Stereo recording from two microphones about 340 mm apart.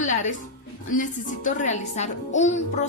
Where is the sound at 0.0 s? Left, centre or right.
Left.